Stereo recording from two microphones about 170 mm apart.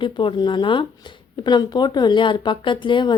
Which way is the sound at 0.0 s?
30° left (ahead or behind).